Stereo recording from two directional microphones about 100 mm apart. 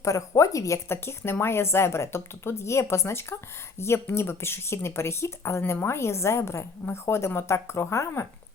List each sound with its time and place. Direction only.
0.0 s speech: 35° left (ahead or behind)